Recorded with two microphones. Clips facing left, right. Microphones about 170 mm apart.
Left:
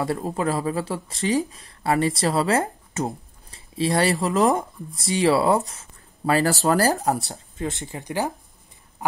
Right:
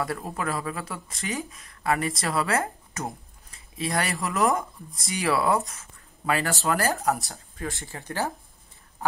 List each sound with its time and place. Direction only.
0.0 s speech: 25° left (ahead or behind)
7.5 s speech: 20° left (ahead or behind)